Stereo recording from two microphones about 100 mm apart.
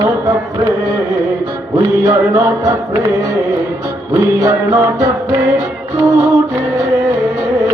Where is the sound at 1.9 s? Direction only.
30° right (ahead or behind).